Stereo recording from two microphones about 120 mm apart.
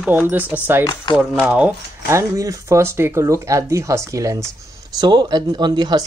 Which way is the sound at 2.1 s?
25° right (ahead or behind).